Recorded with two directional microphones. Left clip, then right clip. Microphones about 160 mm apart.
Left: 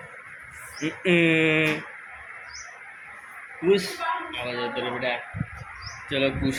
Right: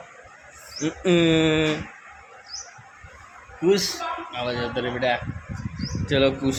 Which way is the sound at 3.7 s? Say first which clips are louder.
Right 1 dB; 45° right (ahead or behind).